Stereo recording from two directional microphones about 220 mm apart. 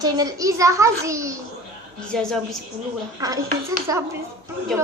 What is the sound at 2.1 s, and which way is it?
Speech, 5° left (ahead or behind).